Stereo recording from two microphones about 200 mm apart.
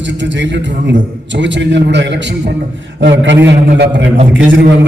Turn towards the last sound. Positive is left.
turn(degrees=-65)  # may be behind; listen again after turning